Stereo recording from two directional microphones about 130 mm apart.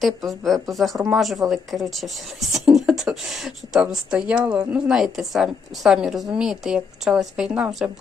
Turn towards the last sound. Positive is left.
turn(degrees=-5)  # may be behind; listen again after turning